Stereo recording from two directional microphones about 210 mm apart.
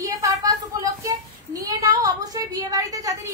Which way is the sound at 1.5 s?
15° right (ahead or behind).